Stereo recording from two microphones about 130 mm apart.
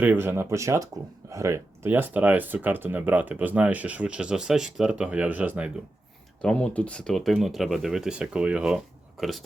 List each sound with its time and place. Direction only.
0.0 s speech: 15° right (ahead or behind)
6.4 s speech: 10° left (ahead or behind)